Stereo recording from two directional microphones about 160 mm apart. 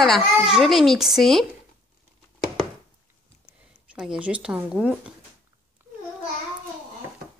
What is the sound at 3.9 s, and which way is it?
Speech, 5° right (ahead or behind).